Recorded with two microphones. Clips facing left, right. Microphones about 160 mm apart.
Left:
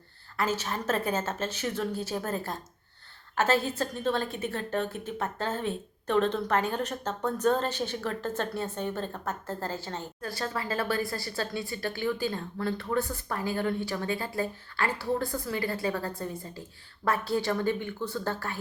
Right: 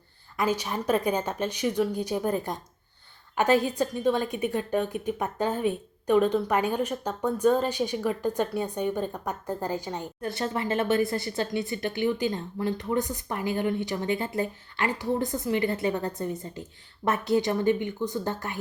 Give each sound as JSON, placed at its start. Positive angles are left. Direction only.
{"t": 0.3, "sound": "a woman's voice", "side_deg": -15}